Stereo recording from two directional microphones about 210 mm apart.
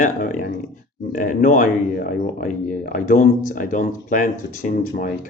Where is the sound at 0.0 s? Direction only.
40° left (ahead or behind).